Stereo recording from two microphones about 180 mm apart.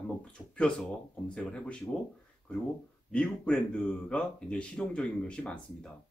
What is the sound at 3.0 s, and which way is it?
Speech, 5° left (ahead or behind).